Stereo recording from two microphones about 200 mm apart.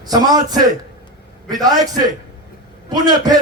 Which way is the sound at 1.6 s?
20° right (ahead or behind).